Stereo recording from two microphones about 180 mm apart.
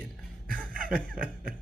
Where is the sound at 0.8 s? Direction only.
50° right (ahead or behind).